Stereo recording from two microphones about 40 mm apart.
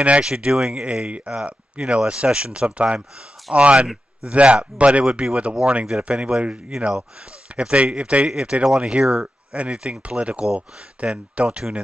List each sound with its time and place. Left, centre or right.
0.2 s speech: right